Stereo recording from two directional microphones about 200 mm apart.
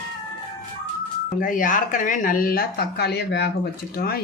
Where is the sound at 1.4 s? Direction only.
40° left (ahead or behind).